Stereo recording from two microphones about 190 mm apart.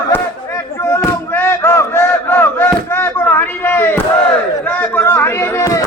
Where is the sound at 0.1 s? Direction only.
15° left (ahead or behind).